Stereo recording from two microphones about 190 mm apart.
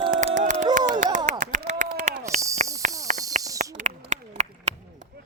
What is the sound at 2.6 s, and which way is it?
Cricket, 40° right (ahead or behind).